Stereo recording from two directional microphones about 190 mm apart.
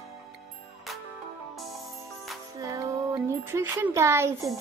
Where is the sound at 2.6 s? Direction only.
15° right (ahead or behind).